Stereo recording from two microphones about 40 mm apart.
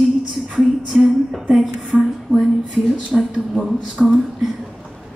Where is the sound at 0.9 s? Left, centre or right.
Centre.